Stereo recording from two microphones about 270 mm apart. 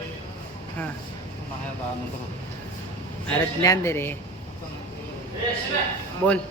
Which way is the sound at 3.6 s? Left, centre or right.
Centre.